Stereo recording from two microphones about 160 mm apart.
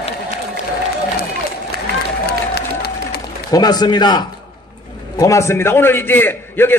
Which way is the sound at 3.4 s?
25° left (ahead or behind).